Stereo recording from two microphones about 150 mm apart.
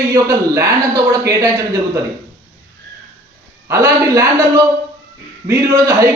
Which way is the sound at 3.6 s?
20° right (ahead or behind).